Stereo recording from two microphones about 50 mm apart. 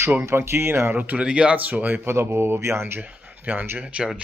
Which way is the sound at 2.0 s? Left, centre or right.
Right.